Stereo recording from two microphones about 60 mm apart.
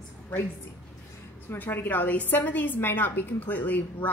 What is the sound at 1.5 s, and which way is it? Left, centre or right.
A woman's voice, left.